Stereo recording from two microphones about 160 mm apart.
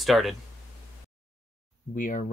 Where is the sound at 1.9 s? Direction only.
55° left (ahead or behind).